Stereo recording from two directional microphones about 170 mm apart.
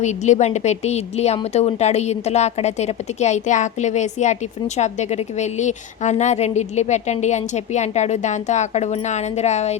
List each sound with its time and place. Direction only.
0.0 s a woman's voice: 45° left (ahead or behind)